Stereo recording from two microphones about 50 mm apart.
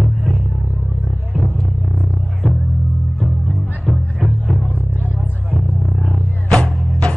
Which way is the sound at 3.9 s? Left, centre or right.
Left.